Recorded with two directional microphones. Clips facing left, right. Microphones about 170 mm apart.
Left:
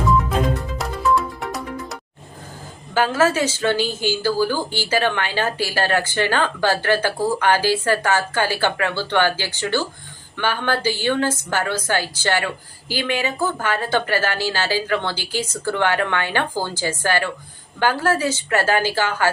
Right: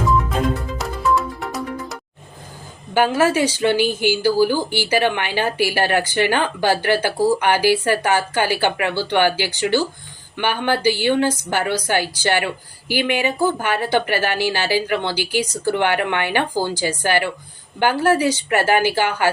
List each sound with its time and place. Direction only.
0.1 s music: centre (ahead or behind)
2.9 s speech: 15° right (ahead or behind)